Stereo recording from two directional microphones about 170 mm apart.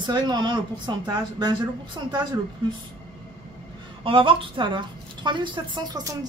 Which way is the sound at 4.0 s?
30° right (ahead or behind).